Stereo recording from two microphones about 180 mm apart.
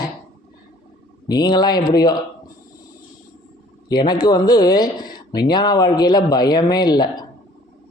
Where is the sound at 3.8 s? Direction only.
25° left (ahead or behind).